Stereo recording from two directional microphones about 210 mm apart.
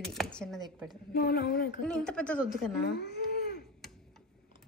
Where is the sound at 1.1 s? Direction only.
45° left (ahead or behind).